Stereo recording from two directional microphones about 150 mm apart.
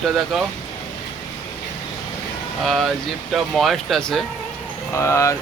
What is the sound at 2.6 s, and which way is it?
Speech, centre (ahead or behind).